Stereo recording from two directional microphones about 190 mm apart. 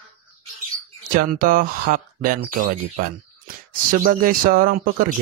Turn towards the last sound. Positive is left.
turn(degrees=-50)  # may be behind; listen again after turning